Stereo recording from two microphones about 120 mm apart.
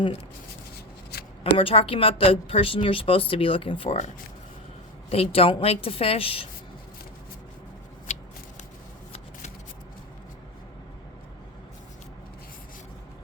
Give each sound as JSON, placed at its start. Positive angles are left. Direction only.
{"t": 1.5, "sound": "speech", "side_deg": 50}
{"t": 5.0, "sound": "speech", "side_deg": 55}